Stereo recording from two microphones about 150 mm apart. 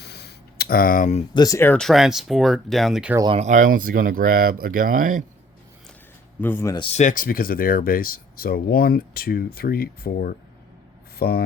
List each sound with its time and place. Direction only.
0.0 s a sound: 90° left; by 1.2 s 60° left (ahead or behind)
1.3 s speech: 25° left (ahead or behind)
1.8 s speech: centre (ahead or behind)
3.3 s speech: 55° right (ahead or behind)
6.4 s speech: 15° left (ahead or behind)
6.7 s speech: 40° left (ahead or behind)
7.0 s speech: 65° left (ahead or behind); by 11.4 s 90° left